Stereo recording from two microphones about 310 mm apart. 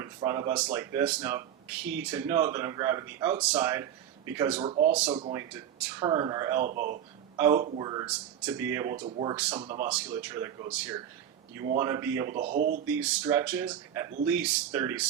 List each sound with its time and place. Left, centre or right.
0.0 s speech: centre
4.6 s speech: centre
6.7 s a man's voice: right
7.3 s speech: centre
9.0 s a man's voice: right
9.3 s speech: centre
9.6 s speech: centre
12.3 s a man's voice: right
12.9 s speech: centre